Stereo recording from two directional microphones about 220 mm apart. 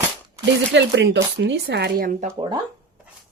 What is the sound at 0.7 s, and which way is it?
Speech, 55° right (ahead or behind).